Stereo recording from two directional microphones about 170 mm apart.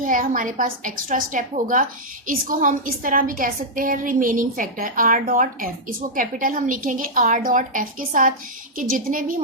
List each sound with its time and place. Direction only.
0.0 s a woman's voice: 50° right (ahead or behind)